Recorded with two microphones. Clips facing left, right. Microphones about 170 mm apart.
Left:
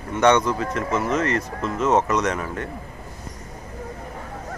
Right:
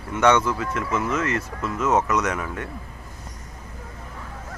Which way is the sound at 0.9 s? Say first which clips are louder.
Left 2 dB; 30° left (ahead or behind).